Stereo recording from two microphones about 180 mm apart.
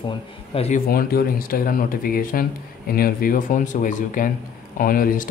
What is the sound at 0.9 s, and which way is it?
Speech, 55° left (ahead or behind).